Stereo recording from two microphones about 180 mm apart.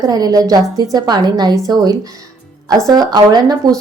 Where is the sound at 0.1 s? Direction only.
20° right (ahead or behind).